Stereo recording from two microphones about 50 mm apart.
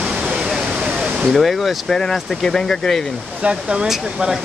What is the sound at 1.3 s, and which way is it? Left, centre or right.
Speech, centre.